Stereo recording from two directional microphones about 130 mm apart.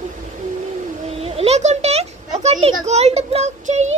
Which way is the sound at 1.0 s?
50° right (ahead or behind).